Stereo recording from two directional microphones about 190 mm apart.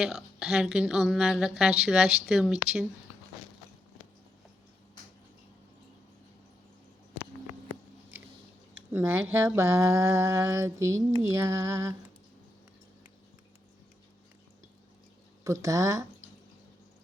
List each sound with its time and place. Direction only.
0.0 s a woman's voice: centre (ahead or behind)
8.9 s speech: 10° right (ahead or behind)
15.6 s speech: 15° right (ahead or behind)